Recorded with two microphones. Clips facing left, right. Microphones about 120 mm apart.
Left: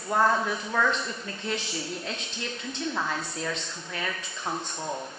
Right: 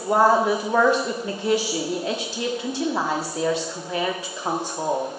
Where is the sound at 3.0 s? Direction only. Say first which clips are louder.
Right 6 dB; 30° right (ahead or behind).